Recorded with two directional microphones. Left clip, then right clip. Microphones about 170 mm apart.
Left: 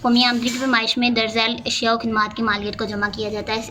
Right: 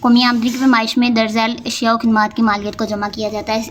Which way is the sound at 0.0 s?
45° right (ahead or behind).